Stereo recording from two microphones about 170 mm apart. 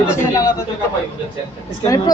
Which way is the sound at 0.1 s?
20° left (ahead or behind).